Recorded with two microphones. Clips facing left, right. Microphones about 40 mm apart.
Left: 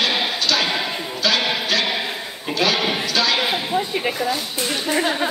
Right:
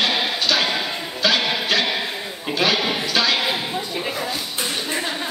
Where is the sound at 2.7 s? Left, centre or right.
Centre.